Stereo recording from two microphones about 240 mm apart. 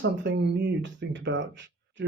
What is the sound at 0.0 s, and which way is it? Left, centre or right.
Speech, right.